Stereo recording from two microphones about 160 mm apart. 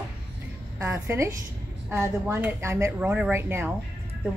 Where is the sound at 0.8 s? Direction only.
15° right (ahead or behind).